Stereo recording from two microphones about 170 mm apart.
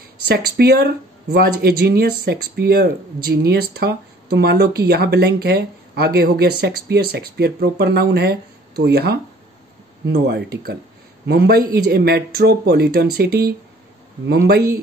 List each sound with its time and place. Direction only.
0.3 s speech: 65° right (ahead or behind)